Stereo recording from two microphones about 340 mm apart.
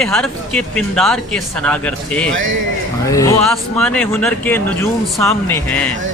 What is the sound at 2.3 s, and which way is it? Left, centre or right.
Speech, right.